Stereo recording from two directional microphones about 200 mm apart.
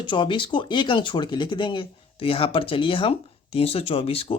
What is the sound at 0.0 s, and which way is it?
Speech, 25° left (ahead or behind).